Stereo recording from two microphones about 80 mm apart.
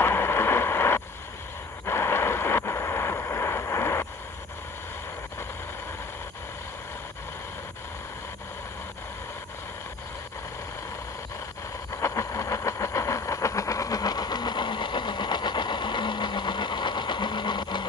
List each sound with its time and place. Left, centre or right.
0.0 s vehicle: left
1.9 s a sound: left
11.9 s vehicle: left